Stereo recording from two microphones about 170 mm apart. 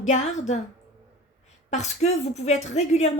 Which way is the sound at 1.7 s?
40° left (ahead or behind).